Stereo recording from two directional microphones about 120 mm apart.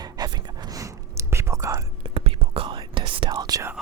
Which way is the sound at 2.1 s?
55° right (ahead or behind).